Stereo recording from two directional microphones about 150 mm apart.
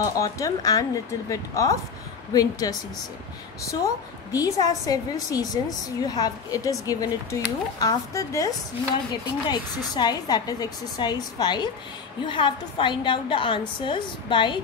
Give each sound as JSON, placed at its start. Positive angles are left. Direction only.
{"t": 0.0, "sound": "a woman's voice", "side_deg": 20}
{"t": 3.8, "sound": "a woman's voice", "side_deg": 25}